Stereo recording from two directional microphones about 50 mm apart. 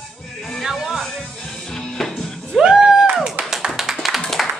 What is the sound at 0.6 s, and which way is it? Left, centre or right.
Music, centre.